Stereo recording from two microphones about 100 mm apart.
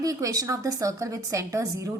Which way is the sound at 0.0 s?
35° right (ahead or behind).